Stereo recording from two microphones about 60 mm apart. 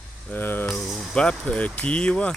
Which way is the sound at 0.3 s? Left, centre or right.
Left.